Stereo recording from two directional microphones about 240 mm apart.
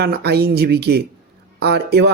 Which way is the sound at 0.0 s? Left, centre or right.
Right.